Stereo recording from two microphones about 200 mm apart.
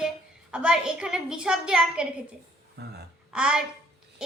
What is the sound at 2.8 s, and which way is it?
Speech, 55° right (ahead or behind).